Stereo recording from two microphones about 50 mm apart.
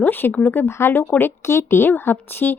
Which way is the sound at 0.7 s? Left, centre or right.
Left.